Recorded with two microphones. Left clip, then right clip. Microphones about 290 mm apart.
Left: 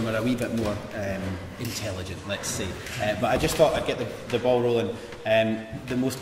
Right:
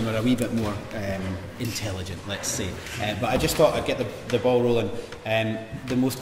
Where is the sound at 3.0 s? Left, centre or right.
Right.